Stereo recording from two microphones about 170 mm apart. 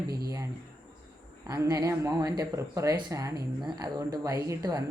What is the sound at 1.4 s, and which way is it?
Speech, 20° right (ahead or behind).